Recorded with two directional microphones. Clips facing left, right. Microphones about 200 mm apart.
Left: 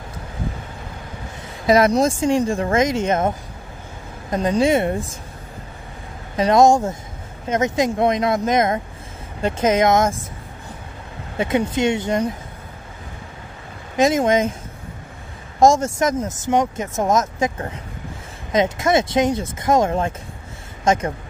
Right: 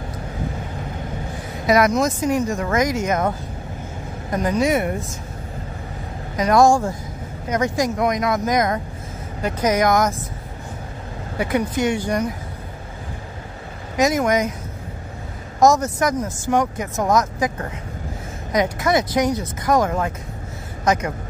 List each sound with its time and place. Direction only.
1.7 s speech: 30° left (ahead or behind)
6.3 s speech: 25° left (ahead or behind)
11.3 s speech: 25° left (ahead or behind)
13.9 s speech: 25° left (ahead or behind)
15.6 s speech: 25° left (ahead or behind)